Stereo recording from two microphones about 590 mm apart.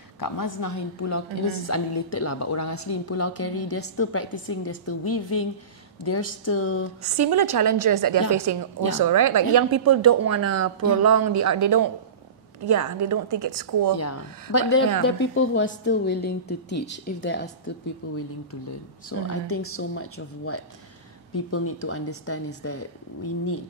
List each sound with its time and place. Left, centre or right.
0.2 s a woman's voice: left
7.0 s a woman's voice: right
13.9 s a woman's voice: left
19.0 s a woman's voice: left